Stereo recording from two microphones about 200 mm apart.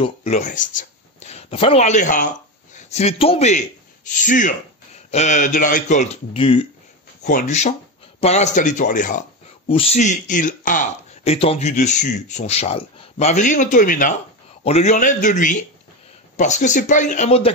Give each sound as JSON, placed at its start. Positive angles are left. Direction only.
{"t": 0.0, "sound": "a man's voice", "side_deg": 35}
{"t": 7.2, "sound": "speech", "side_deg": 40}
{"t": 9.7, "sound": "speech", "side_deg": 30}
{"t": 11.3, "sound": "speech", "side_deg": 30}